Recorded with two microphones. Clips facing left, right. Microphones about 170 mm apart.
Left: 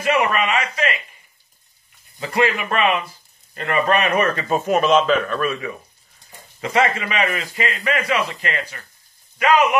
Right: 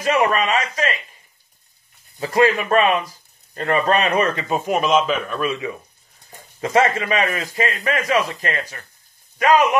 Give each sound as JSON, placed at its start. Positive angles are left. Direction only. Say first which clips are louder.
{"t": 0.0, "sound": "a man's voice", "louder": "right 1 dB", "side_deg": -35}
{"t": 2.1, "sound": "a man's voice", "louder": "right 3 dB", "side_deg": -40}
{"t": 6.6, "sound": "a man's voice", "louder": "right 2 dB", "side_deg": -40}